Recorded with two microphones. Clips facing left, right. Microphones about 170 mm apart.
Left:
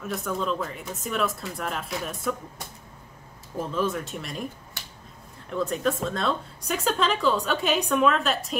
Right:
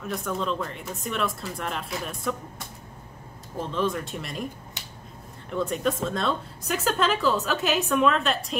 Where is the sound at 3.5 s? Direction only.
5° left (ahead or behind).